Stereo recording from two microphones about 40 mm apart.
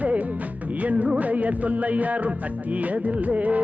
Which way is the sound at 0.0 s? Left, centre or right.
Right.